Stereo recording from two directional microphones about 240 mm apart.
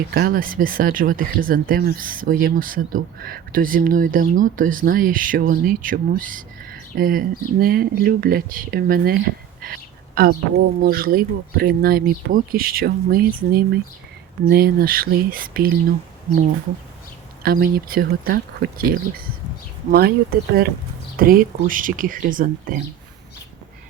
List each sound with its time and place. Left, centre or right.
0.1 s speech: right
17.4 s speech: right